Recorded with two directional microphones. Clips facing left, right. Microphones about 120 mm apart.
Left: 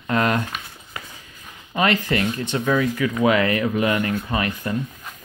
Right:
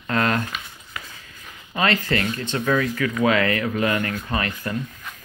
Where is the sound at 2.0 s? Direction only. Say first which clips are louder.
Left 2 dB; 20° left (ahead or behind).